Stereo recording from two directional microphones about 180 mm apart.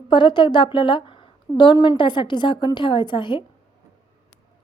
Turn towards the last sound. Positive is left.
turn(degrees=25)  # may be behind; listen again after turning